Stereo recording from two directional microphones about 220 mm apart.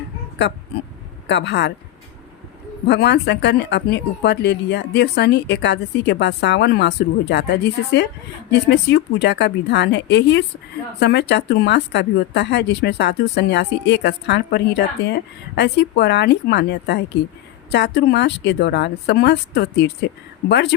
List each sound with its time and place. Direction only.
1.3 s speech: 50° left (ahead or behind)
2.8 s speech: 50° left (ahead or behind)